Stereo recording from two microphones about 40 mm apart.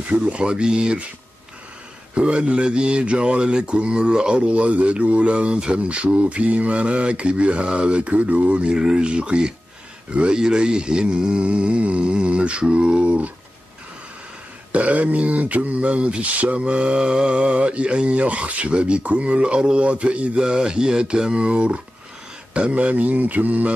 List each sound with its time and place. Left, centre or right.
0.3 s speech: right
2.1 s speech: right
8.7 s speech: right
14.7 s speech: right
20.4 s speech: centre; by 23.7 s right